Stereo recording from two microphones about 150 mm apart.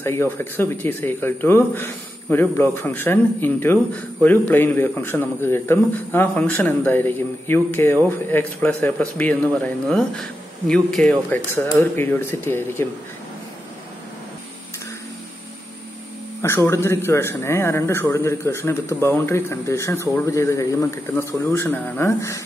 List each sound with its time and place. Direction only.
0.0 s speech: 15° left (ahead or behind)
16.3 s speech: 15° left (ahead or behind)